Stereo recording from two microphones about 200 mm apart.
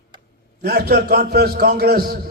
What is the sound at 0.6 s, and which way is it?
A man's voice, 50° right (ahead or behind).